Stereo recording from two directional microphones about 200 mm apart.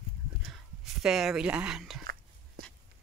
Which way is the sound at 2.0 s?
50° right (ahead or behind).